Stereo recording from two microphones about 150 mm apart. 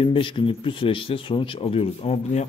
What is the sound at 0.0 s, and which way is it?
Speech, 35° left (ahead or behind).